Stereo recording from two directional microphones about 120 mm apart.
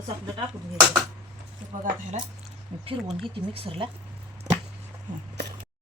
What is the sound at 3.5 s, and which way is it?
Speech, 50° right (ahead or behind).